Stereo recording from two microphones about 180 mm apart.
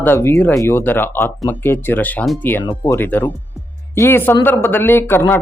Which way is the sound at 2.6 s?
25° left (ahead or behind).